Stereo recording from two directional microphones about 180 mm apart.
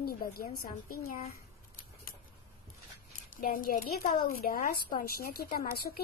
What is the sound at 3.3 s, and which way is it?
A woman's voice, 50° left (ahead or behind).